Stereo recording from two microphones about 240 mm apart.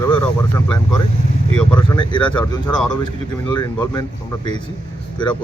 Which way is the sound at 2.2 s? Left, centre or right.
Centre.